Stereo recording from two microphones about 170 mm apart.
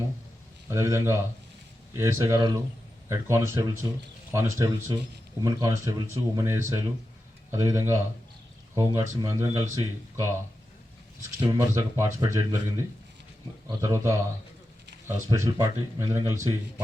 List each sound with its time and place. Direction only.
0.7 s speech: 15° right (ahead or behind)
13.7 s speech: 15° right (ahead or behind)